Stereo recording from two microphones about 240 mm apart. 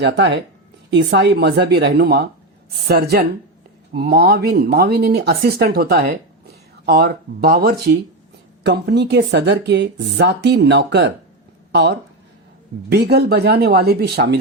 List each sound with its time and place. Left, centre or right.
0.0 s speech: right